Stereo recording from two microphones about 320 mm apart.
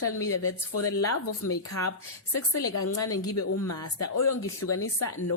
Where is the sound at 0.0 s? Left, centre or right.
Left.